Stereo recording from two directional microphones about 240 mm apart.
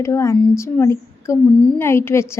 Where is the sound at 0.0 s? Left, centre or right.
Centre.